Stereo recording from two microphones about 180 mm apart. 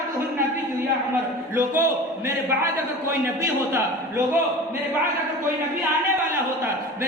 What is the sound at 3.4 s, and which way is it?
Speech, 15° right (ahead or behind).